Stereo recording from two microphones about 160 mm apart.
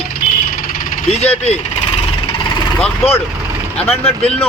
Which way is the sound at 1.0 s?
40° left (ahead or behind).